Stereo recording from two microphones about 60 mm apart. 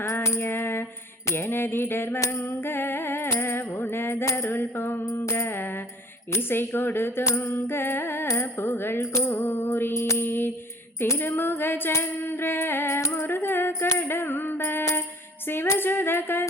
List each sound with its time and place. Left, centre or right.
0.0 s music: left
0.3 s music: left
2.1 s a sound: left
2.4 s music: left
9.9 s mantra: left
10.2 s music: left